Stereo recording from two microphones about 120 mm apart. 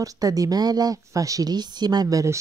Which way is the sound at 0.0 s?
30° right (ahead or behind).